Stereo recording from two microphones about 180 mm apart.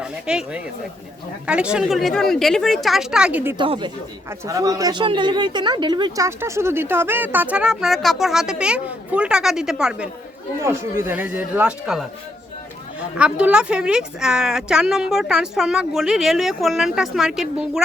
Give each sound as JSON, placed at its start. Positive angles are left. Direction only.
{"t": 0.0, "sound": "a woman's voice", "side_deg": -5}
{"t": 3.6, "sound": "speech", "side_deg": -25}
{"t": 10.6, "sound": "a woman's voice", "side_deg": -15}